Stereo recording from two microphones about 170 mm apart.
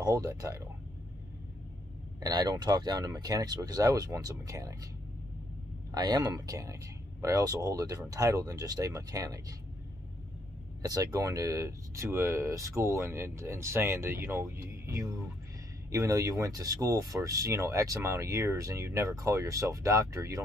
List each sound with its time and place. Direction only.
0.0 s speech: 20° right (ahead or behind)
2.1 s speech: 20° right (ahead or behind)
5.9 s speech: 25° right (ahead or behind)
10.8 s speech: 20° right (ahead or behind)